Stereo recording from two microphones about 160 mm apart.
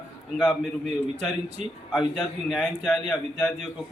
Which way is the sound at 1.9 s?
Centre (ahead or behind).